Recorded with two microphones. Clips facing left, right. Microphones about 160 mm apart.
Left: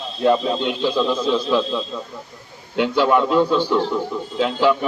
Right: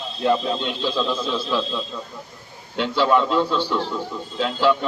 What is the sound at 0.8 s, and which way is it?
Speech, 15° left (ahead or behind).